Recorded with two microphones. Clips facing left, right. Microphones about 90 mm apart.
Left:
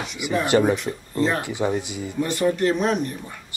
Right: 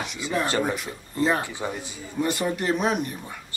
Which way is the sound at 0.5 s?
15° left (ahead or behind).